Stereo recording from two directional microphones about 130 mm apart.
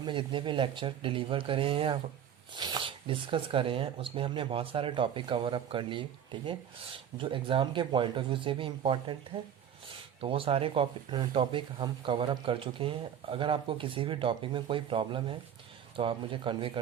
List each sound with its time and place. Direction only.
0.0 s speech: 40° right (ahead or behind)
10.2 s speech: 45° right (ahead or behind)